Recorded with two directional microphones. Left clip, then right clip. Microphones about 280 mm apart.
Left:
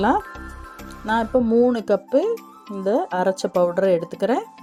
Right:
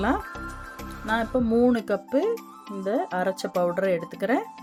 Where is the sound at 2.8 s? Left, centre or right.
Centre.